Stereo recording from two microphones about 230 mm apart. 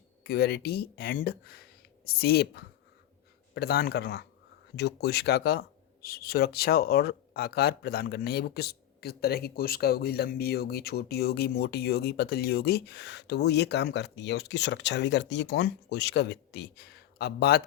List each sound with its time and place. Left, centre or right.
0.3 s speech: left